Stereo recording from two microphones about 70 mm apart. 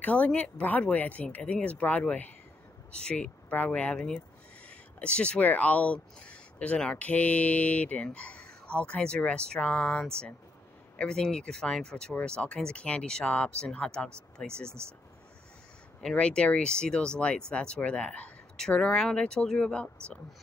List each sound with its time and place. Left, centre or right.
0.0 s speech: centre
16.2 s speech: centre